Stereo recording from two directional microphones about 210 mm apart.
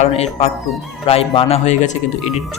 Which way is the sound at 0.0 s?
30° left (ahead or behind).